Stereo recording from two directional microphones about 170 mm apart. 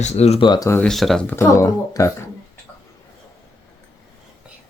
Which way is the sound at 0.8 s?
Centre (ahead or behind).